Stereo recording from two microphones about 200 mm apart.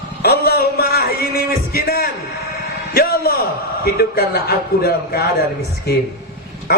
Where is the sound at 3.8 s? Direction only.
50° left (ahead or behind).